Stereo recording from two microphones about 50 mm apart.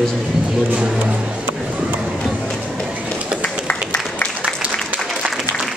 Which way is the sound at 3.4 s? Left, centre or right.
Left.